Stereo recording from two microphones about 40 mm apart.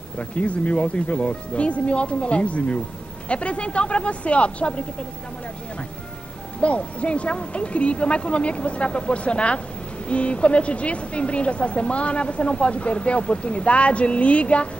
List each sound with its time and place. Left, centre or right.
0.2 s a woman's voice: left
6.6 s a woman's voice: left